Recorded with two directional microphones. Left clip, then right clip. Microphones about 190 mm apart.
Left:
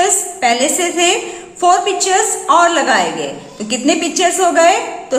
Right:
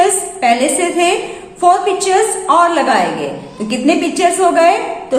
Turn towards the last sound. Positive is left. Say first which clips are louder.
# right 1 dB
turn(degrees=20)  # may be behind; listen again after turning